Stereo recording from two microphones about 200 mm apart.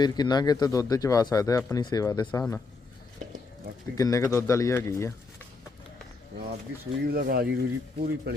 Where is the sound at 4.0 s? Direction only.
15° left (ahead or behind).